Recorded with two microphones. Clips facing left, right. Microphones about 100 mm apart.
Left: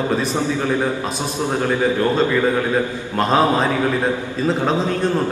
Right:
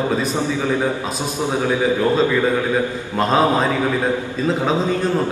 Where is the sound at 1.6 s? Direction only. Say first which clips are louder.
Even; 5° right (ahead or behind).